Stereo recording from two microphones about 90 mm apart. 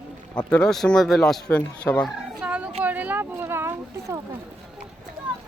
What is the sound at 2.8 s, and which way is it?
Speech, 15° right (ahead or behind).